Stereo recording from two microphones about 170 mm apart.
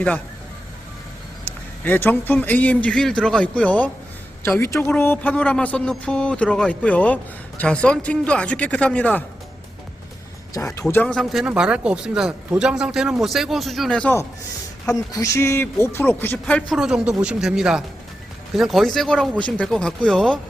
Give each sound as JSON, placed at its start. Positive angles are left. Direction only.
{"t": 1.5, "sound": "speech", "side_deg": 10}
{"t": 10.9, "sound": "a man's voice", "side_deg": 5}